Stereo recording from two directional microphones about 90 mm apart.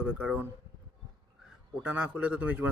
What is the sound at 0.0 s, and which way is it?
Speech, 15° right (ahead or behind).